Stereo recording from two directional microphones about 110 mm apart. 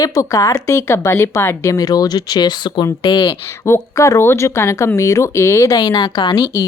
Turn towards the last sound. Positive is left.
turn(degrees=35)  # may be behind; listen again after turning